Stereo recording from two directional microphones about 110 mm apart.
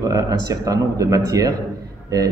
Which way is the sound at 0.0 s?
35° right (ahead or behind).